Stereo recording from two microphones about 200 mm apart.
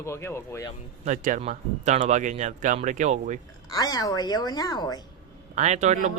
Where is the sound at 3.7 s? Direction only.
15° left (ahead or behind).